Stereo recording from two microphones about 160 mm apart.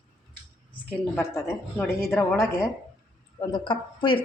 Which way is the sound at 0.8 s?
15° left (ahead or behind).